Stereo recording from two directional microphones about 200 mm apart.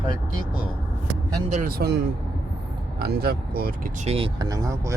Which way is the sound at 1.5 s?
45° right (ahead or behind).